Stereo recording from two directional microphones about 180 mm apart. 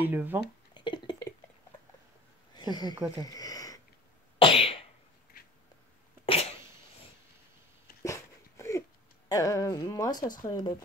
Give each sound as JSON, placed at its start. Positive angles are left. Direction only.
{"t": 0.0, "sound": "speech", "side_deg": -10}
{"t": 0.7, "sound": "a sound", "side_deg": 25}
{"t": 2.9, "sound": "speech", "side_deg": -20}
{"t": 3.3, "sound": "sniff", "side_deg": 20}
{"t": 4.4, "sound": "cough", "side_deg": 30}
{"t": 6.2, "sound": "cough", "side_deg": 35}
{"t": 8.0, "sound": "a sound", "side_deg": 15}
{"t": 9.3, "sound": "a woman's voice", "side_deg": 20}